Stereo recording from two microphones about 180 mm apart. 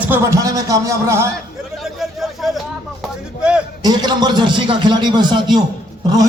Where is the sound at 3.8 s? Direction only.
25° right (ahead or behind).